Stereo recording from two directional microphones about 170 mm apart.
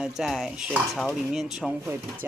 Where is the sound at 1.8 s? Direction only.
10° right (ahead or behind).